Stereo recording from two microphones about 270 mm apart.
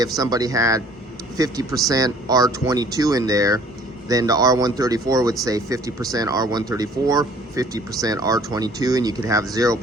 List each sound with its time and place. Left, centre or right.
0.0 s speech: centre